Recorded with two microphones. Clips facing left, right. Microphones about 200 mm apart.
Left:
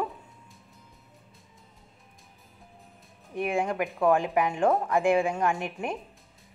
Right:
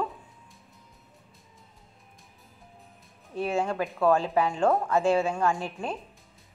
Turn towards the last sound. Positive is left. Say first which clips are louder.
# even
turn(degrees=20)  # may be behind; listen again after turning